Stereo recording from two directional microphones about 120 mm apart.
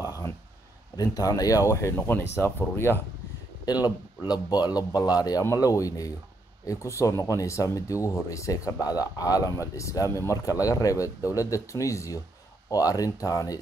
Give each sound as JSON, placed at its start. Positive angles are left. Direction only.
{"t": 0.9, "sound": "speech", "side_deg": 30}
{"t": 3.6, "sound": "a man's voice", "side_deg": 35}